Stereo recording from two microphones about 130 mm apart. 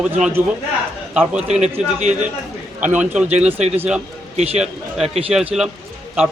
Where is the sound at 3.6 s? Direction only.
55° right (ahead or behind).